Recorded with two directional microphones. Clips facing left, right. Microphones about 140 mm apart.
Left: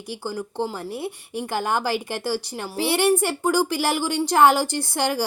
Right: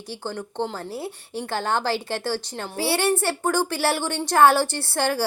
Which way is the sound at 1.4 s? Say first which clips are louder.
Left 1 dB; 10° left (ahead or behind).